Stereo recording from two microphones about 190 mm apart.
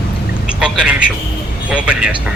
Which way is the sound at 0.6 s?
5° right (ahead or behind).